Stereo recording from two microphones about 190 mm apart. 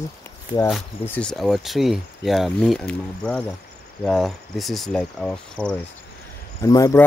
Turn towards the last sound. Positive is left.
turn(degrees=15)  # may be behind; listen again after turning